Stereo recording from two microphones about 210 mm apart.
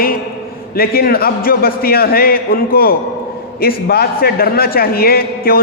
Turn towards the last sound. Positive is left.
turn(degrees=45)  # may be behind; listen again after turning